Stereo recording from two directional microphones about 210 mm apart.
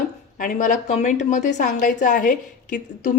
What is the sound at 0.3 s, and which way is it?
A woman's voice, 40° left (ahead or behind).